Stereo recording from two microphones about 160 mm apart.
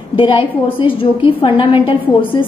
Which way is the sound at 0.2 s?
35° left (ahead or behind).